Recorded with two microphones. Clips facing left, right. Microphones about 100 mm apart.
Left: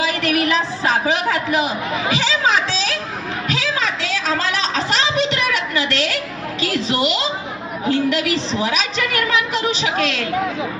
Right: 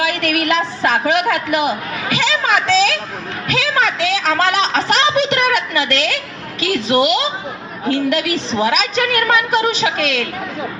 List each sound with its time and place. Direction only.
0.0 s a woman's voice: 55° right (ahead or behind)
3.5 s a sound: 60° right (ahead or behind)
6.6 s a woman's voice: 55° right (ahead or behind)